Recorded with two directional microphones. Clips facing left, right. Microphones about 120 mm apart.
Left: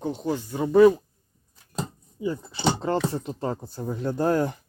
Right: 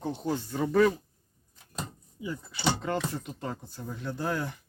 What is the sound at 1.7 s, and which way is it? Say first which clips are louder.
Speech: left 6 dB; 35° left (ahead or behind).